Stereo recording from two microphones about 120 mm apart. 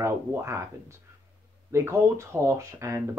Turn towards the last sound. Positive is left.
turn(degrees=-25)  # may be behind; listen again after turning